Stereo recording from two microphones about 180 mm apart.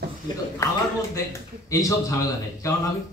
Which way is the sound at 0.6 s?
15° left (ahead or behind).